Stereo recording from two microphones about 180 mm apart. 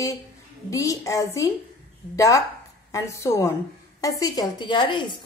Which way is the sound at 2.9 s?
15° left (ahead or behind).